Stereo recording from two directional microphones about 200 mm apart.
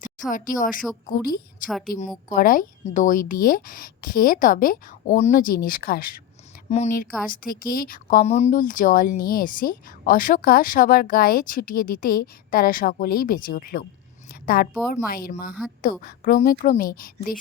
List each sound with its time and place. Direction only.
0.3 s speech: 40° left (ahead or behind)
6.7 s a woman's voice: 35° left (ahead or behind)